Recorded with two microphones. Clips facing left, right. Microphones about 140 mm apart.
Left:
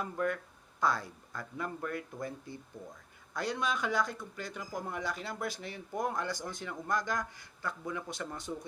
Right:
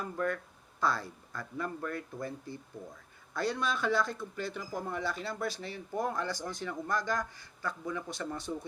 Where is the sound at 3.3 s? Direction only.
15° left (ahead or behind).